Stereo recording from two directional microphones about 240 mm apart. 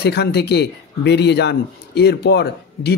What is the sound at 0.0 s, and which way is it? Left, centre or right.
Speech, left.